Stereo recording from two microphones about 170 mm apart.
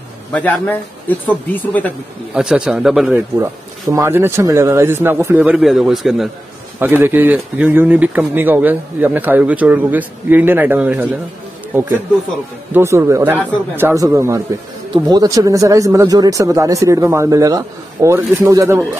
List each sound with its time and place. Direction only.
0.3 s speech: 10° left (ahead or behind)
2.3 s a man's voice: 5° right (ahead or behind)
3.9 s a man's voice: 15° right (ahead or behind)
6.8 s a man's voice: 10° right (ahead or behind)
12.7 s a man's voice: 15° right (ahead or behind)